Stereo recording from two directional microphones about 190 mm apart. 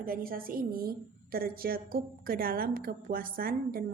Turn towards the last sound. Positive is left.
turn(degrees=-50)  # may be behind; listen again after turning